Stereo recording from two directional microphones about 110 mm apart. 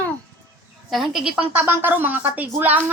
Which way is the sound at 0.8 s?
Centre (ahead or behind).